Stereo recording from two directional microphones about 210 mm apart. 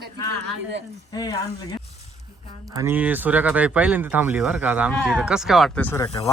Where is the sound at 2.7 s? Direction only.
10° right (ahead or behind).